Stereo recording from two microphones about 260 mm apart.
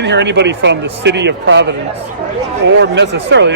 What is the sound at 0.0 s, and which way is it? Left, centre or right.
Speech, right.